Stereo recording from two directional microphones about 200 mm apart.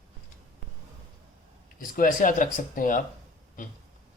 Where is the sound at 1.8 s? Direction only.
45° left (ahead or behind).